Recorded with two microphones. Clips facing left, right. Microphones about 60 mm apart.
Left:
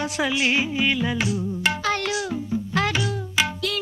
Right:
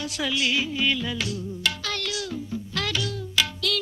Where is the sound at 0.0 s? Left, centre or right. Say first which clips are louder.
Left 4 dB; left.